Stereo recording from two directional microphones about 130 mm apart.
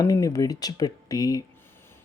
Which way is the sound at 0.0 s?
25° left (ahead or behind).